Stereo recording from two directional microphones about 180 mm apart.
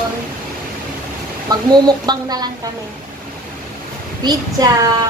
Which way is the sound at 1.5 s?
20° right (ahead or behind).